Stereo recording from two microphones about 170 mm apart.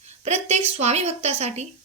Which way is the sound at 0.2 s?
40° right (ahead or behind).